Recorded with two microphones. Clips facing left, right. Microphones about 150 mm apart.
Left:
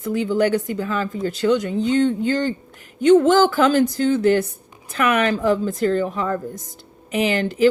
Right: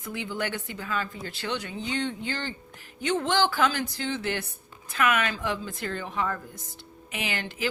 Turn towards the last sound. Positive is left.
turn(degrees=40)  # may be behind; listen again after turning